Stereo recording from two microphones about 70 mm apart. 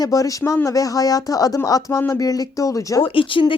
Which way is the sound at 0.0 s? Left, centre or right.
Left.